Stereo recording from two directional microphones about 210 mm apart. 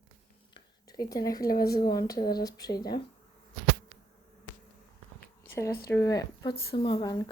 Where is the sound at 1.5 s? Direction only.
45° left (ahead or behind).